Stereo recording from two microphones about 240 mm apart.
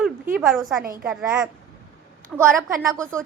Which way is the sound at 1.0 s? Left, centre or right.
Centre.